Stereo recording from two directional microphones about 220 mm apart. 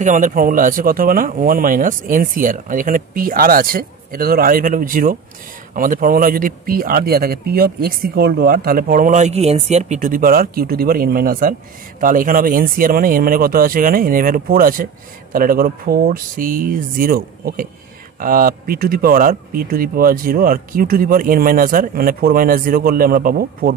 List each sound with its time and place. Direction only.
0.0 s a man's voice: 35° right (ahead or behind)